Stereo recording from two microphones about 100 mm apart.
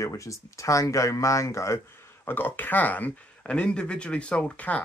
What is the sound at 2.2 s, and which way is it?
Speech, 20° left (ahead or behind).